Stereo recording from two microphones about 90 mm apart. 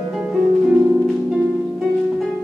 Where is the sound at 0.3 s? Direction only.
10° right (ahead or behind).